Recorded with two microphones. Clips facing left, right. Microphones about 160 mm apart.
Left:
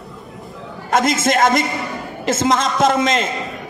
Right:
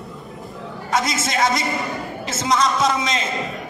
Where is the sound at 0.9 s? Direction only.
50° left (ahead or behind).